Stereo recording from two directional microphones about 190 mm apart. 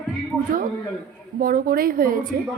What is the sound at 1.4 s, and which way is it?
Speech, 50° right (ahead or behind).